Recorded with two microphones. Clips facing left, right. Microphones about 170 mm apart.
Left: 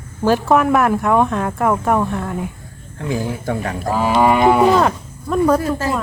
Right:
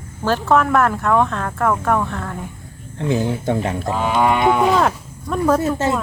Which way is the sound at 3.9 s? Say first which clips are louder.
Left 4 dB; 5° left (ahead or behind).